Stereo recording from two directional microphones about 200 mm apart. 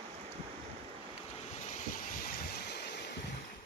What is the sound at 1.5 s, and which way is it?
Vehicle, 35° left (ahead or behind).